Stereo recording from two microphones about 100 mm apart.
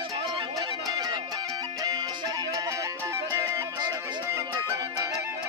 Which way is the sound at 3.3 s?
45° right (ahead or behind).